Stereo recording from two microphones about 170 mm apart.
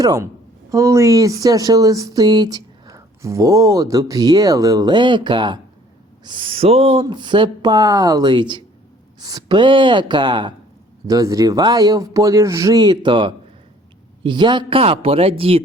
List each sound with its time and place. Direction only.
0.0 s speech: 20° right (ahead or behind)